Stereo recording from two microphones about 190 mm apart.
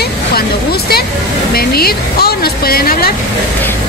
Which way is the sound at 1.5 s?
55° left (ahead or behind).